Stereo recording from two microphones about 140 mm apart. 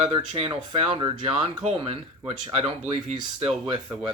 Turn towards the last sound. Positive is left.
turn(degrees=-35)  # may be behind; listen again after turning